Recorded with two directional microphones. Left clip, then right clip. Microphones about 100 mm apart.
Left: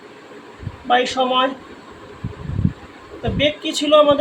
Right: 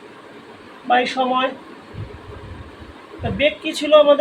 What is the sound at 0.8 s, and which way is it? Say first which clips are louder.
Speech: even; 45° left (ahead or behind).